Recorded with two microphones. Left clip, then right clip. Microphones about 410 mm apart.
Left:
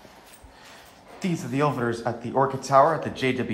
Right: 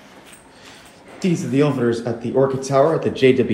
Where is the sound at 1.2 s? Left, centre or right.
Left.